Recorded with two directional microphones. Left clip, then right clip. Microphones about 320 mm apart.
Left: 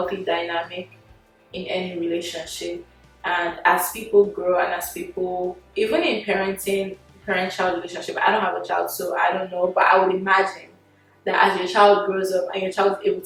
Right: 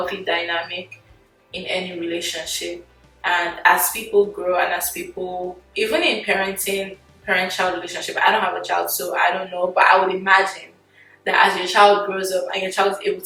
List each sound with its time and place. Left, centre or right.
0.0 s speech: centre
4.1 s speech: left
4.4 s speech: centre